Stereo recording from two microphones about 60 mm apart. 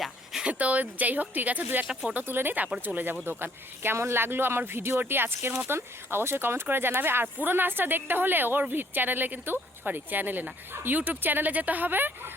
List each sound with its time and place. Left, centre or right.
0.4 s speech: right